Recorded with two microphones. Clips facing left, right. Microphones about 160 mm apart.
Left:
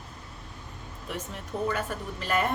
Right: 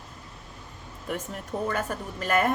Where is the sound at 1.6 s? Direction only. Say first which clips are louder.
Even; 45° right (ahead or behind).